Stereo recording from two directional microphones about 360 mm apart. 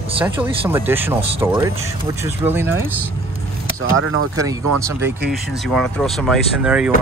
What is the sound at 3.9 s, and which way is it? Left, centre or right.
Speech, right.